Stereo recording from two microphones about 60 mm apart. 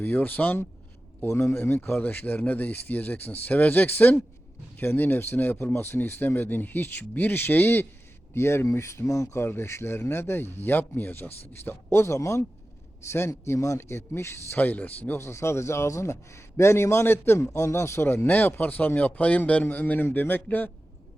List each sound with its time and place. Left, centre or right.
0.0 s speech: left
1.2 s a man's voice: left
1.6 s a man's voice: left
14.5 s speech: left
15.2 s a man's voice: left